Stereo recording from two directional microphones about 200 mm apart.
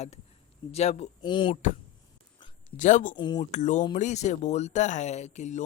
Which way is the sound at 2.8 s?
40° left (ahead or behind).